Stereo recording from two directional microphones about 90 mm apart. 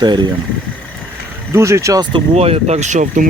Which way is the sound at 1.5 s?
35° right (ahead or behind).